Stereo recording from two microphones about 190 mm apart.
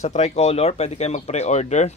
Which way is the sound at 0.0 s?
35° left (ahead or behind).